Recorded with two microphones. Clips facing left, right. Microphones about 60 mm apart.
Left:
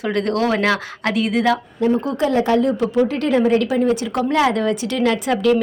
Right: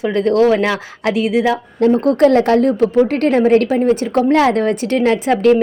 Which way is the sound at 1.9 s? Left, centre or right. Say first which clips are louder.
Right 8 dB; right.